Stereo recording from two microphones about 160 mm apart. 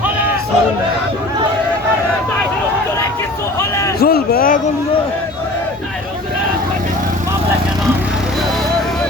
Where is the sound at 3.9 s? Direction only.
75° left (ahead or behind); by 4.7 s 55° left (ahead or behind).